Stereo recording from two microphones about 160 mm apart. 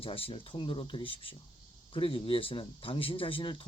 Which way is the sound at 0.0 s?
35° left (ahead or behind).